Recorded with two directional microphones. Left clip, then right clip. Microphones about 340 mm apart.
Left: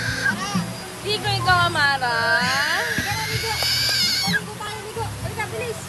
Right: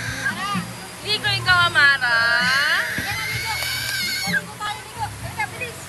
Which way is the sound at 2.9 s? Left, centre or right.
Centre.